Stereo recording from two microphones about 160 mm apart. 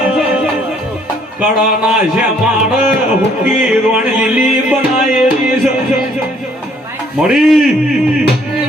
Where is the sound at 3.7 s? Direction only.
5° right (ahead or behind).